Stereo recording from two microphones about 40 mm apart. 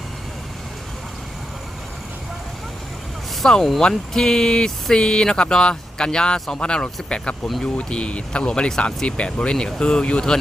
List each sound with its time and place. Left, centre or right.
3.4 s speech: centre; by 10.3 s left